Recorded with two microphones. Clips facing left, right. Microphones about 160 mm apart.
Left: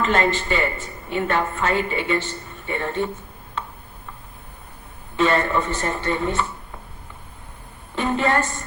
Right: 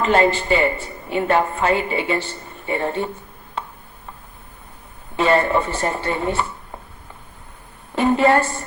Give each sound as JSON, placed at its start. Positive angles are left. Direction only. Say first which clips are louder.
{"t": 0.0, "sound": "a woman's voice", "louder": "right 4 dB", "side_deg": -35}
{"t": 5.1, "sound": "a woman's voice", "louder": "right 3 dB", "side_deg": -35}
{"t": 7.9, "sound": "a sound", "louder": "right 6 dB", "side_deg": -40}